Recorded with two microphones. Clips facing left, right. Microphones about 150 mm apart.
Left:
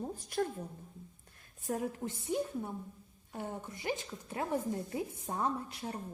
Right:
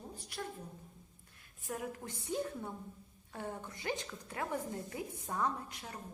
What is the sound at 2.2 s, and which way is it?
A woman's voice, 20° left (ahead or behind).